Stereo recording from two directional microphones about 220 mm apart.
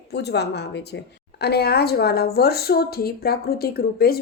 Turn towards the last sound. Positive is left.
turn(degrees=45)  # may be behind; listen again after turning